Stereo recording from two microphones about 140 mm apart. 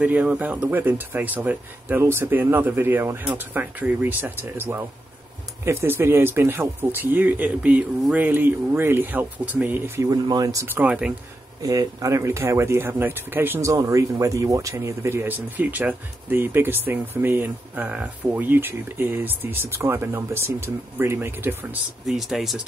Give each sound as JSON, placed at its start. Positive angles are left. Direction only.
{"t": 0.0, "sound": "speech", "side_deg": -10}
{"t": 11.6, "sound": "speech", "side_deg": -25}
{"t": 22.0, "sound": "speech", "side_deg": 0}